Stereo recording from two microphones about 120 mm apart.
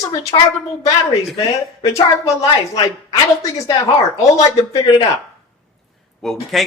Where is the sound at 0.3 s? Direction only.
40° left (ahead or behind).